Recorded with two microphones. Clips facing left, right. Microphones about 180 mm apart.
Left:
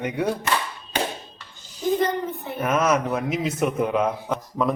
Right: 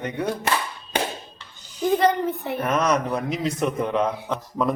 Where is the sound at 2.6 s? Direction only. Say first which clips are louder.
Left 1 dB; 5° left (ahead or behind).